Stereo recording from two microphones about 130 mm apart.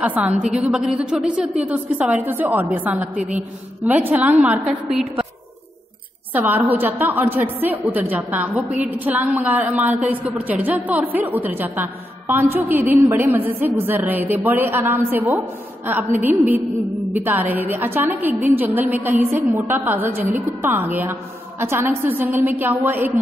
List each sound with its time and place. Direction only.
0.0 s a woman's voice: 10° right (ahead or behind)
6.3 s a woman's voice: 15° right (ahead or behind)